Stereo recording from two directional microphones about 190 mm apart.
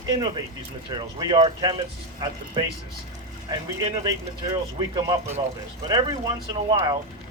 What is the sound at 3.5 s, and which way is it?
Speech, 20° right (ahead or behind).